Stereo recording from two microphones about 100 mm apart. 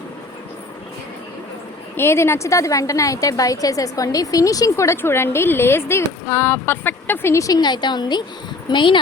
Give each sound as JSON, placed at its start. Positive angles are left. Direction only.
{"t": 2.0, "sound": "a woman's voice", "side_deg": 25}